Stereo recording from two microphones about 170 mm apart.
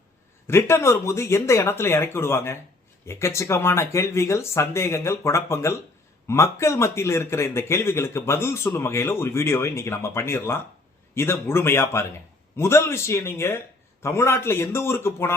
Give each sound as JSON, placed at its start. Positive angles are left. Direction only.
{"t": 0.4, "sound": "a man's voice", "side_deg": 15}